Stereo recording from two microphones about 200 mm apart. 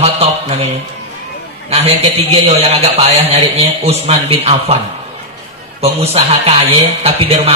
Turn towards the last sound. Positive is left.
turn(degrees=-30)  # may be behind; listen again after turning